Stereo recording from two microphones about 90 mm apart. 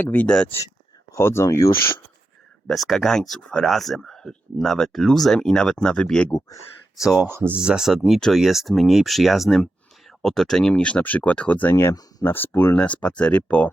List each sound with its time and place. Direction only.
0.0 s speech: 20° left (ahead or behind)
1.1 s speech: 30° left (ahead or behind)
2.6 s speech: 5° left (ahead or behind)
6.9 s speech: 5° right (ahead or behind)
7.3 s speech: 25° right (ahead or behind)
7.6 s speech: 5° right (ahead or behind); by 13.7 s 15° left (ahead or behind)